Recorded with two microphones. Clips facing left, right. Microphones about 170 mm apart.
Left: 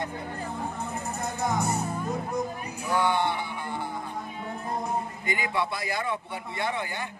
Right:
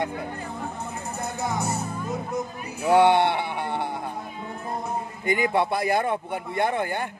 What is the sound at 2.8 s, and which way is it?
Bleat, 70° right (ahead or behind).